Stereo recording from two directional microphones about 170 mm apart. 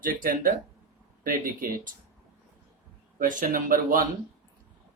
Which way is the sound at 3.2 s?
50° right (ahead or behind).